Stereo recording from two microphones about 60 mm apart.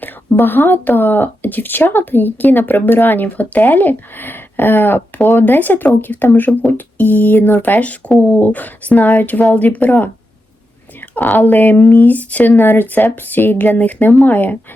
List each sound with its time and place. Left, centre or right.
0.0 s speech: left
11.3 s speech: left